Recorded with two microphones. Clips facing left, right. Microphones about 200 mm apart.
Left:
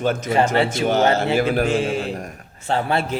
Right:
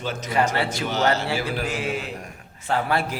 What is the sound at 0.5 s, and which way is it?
Speech, 25° left (ahead or behind).